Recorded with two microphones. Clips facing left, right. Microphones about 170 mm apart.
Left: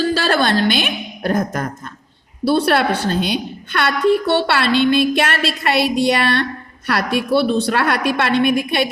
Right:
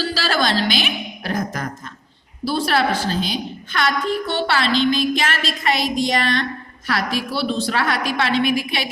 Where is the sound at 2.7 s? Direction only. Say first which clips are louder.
Left 3 dB; 60° left (ahead or behind).